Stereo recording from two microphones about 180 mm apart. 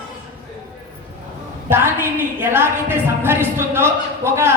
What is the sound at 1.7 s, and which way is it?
A woman's voice, 10° right (ahead or behind).